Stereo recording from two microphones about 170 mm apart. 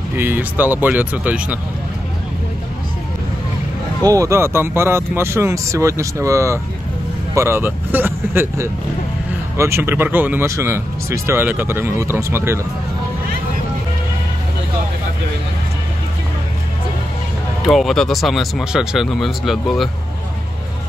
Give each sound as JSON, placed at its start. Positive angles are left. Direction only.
{"t": 0.1, "sound": "speech", "side_deg": -10}
{"t": 4.1, "sound": "speech", "side_deg": -20}
{"t": 17.6, "sound": "speech", "side_deg": 0}